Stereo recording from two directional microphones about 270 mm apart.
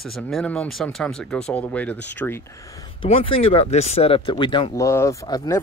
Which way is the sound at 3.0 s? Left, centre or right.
Left.